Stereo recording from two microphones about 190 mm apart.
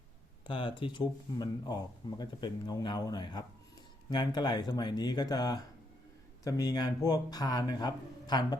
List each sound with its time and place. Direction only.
0.4 s speech: 25° left (ahead or behind)